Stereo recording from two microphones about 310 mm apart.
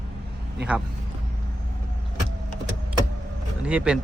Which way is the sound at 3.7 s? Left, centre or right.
Centre.